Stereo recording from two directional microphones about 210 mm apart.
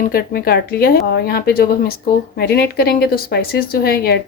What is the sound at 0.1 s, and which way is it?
A woman's voice, 45° left (ahead or behind).